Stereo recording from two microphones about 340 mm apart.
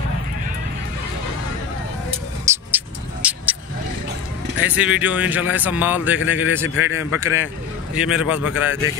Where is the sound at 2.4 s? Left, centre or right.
Centre.